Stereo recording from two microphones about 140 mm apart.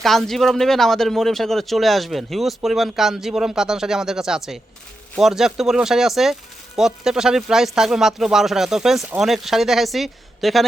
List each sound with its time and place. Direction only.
0.0 s speech: centre (ahead or behind)